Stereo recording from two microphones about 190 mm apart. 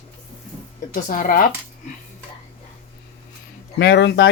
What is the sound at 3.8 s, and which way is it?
Speech, 65° left (ahead or behind).